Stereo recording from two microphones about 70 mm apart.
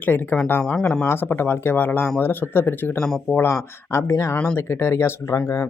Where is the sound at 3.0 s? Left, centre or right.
Centre.